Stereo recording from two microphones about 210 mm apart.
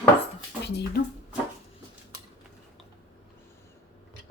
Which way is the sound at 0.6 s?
50° left (ahead or behind).